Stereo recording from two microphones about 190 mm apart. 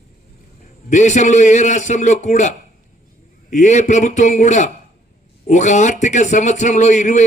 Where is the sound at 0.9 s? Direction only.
40° left (ahead or behind).